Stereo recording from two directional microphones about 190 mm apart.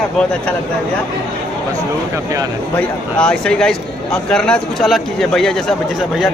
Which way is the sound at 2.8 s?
5° left (ahead or behind).